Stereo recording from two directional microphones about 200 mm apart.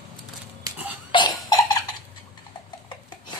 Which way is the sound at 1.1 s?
20° left (ahead or behind).